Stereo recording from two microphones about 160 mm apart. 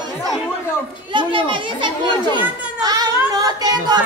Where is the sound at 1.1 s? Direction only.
30° right (ahead or behind).